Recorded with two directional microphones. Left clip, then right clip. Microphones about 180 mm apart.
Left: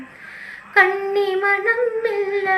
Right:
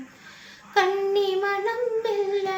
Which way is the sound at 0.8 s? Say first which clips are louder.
Left 5 dB; 25° right (ahead or behind).